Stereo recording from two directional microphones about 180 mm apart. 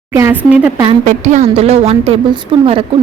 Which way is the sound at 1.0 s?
40° right (ahead or behind).